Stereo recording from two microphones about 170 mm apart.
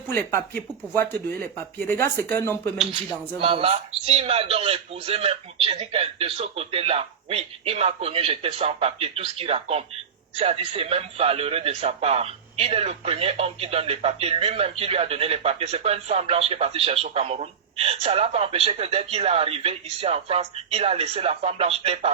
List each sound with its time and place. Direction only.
0.1 s speech: 15° left (ahead or behind)
3.4 s a man's voice: 35° right (ahead or behind)